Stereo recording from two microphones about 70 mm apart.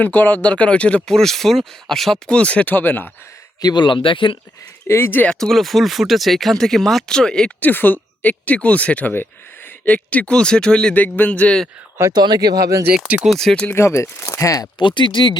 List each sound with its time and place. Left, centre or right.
0.0 s speech: left
1.0 s speech: centre
2.3 s speech: centre
3.6 s speech: left
4.9 s speech: left
5.4 s speech: centre
7.6 s speech: left; by 10.9 s centre
10.9 s speech: left
12.1 s speech: right
13.3 s speech: centre
13.7 s speech: left